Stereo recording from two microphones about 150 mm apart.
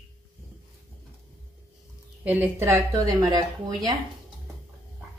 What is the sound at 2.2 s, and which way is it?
Speech, 15° right (ahead or behind).